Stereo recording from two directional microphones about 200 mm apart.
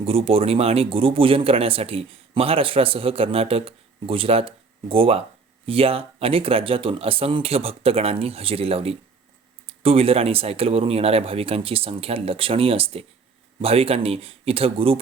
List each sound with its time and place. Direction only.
0.0 s speech: 30° right (ahead or behind)